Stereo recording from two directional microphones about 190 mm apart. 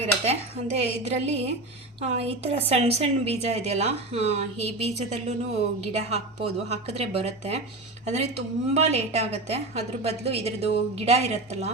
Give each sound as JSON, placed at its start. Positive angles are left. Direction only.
{"t": 0.0, "sound": "a woman's voice", "side_deg": -35}